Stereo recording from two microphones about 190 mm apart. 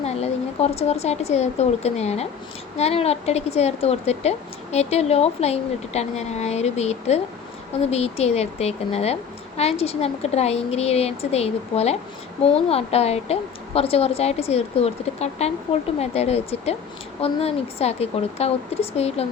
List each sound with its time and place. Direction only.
0.0 s speech: 35° left (ahead or behind)